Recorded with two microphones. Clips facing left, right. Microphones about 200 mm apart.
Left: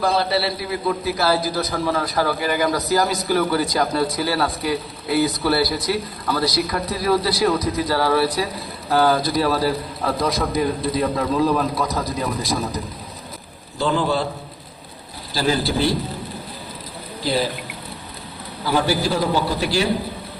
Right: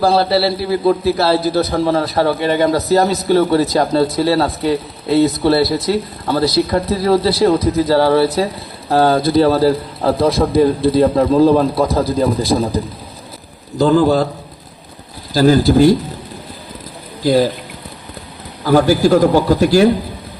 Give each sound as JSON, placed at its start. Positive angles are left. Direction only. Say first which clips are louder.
{"t": 0.0, "sound": "a man's voice", "louder": "right 7 dB", "side_deg": -30}
{"t": 13.7, "sound": "a man's voice", "louder": "right 9 dB", "side_deg": -40}
{"t": 15.3, "sound": "a man's voice", "louder": "right 10 dB", "side_deg": -45}
{"t": 17.2, "sound": "a man's voice", "louder": "right 9 dB", "side_deg": -45}
{"t": 18.6, "sound": "a man's voice", "louder": "right 9 dB", "side_deg": -45}